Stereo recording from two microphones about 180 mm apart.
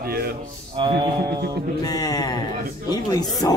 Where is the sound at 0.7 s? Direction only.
25° right (ahead or behind).